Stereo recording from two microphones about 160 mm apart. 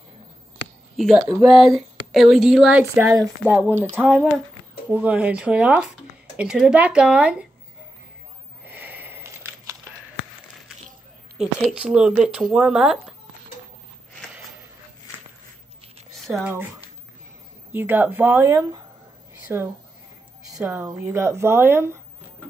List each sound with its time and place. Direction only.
0.9 s speech: centre (ahead or behind)
2.8 s speech: 15° right (ahead or behind)
8.6 s sniff: 10° right (ahead or behind)
11.3 s speech: 5° right (ahead or behind)
16.1 s a sound: centre (ahead or behind)
17.7 s speech: 10° right (ahead or behind)